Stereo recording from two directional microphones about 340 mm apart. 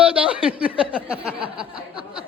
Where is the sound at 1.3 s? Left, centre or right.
Centre.